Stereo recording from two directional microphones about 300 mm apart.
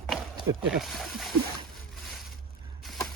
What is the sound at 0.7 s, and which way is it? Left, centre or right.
Speech, centre.